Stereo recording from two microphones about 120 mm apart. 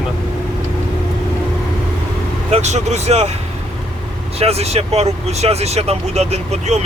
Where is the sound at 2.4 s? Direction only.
65° right (ahead or behind).